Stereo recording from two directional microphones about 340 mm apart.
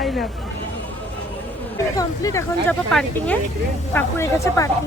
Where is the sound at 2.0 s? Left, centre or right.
Centre.